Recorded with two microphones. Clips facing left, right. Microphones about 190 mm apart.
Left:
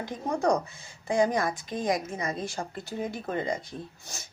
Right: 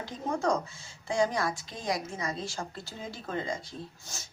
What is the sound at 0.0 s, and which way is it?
A woman's voice, 15° left (ahead or behind).